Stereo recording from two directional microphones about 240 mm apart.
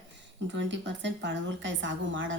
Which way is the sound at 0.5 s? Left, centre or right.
Right.